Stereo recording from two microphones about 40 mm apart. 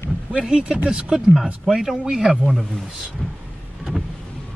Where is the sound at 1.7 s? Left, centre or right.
Centre.